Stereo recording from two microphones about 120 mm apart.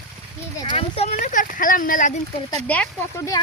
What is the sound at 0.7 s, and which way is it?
Speech, 60° left (ahead or behind).